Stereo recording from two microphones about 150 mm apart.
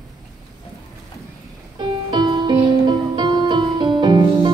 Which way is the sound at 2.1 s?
30° right (ahead or behind).